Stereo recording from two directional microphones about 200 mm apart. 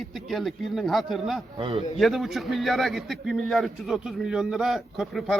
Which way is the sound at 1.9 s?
Centre (ahead or behind).